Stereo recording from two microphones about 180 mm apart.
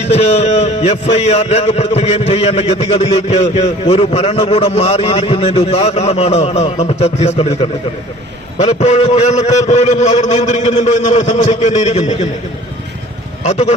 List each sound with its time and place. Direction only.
0.1 s a man's voice: 35° left (ahead or behind)
13.4 s a man's voice: 40° left (ahead or behind)